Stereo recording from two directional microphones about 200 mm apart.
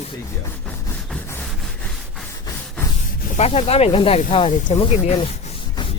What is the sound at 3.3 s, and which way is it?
Speech, 30° left (ahead or behind).